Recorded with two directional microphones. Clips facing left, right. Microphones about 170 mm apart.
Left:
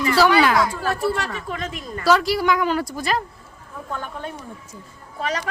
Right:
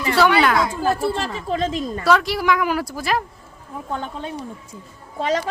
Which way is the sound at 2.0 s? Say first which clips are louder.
Left 1 dB; centre (ahead or behind).